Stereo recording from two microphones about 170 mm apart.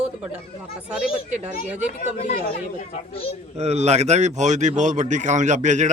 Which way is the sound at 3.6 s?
40° right (ahead or behind).